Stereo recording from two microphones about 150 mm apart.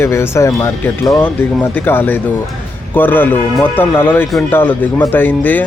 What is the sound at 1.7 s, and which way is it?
Speech, 15° left (ahead or behind).